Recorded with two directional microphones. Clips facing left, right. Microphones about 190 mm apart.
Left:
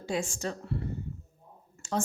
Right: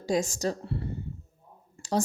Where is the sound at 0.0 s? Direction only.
40° right (ahead or behind).